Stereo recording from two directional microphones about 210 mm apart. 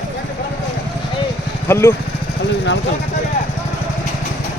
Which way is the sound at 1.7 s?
10° left (ahead or behind).